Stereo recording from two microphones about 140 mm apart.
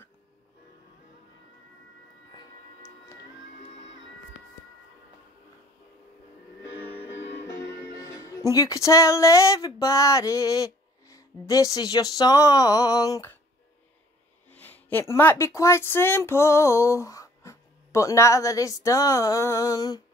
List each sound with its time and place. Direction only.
8.0 s speech: 25° left (ahead or behind)
9.8 s music: 25° left (ahead or behind)
14.5 s speech: 15° left (ahead or behind)